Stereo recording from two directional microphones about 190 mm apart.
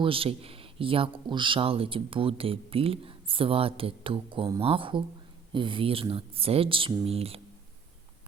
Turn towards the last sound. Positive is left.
turn(degrees=-30)  # may be behind; listen again after turning